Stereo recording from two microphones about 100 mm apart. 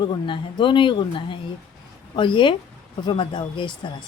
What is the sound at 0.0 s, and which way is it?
Speech, 50° left (ahead or behind).